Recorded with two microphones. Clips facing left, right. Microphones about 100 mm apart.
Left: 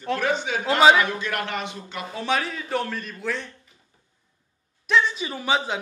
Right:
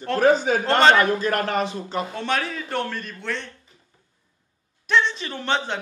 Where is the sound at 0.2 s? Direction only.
40° right (ahead or behind).